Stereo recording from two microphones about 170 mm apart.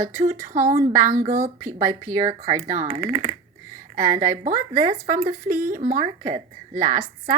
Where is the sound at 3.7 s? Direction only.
50° right (ahead or behind).